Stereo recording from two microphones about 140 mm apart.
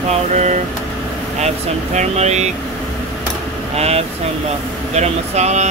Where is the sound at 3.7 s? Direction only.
50° right (ahead or behind).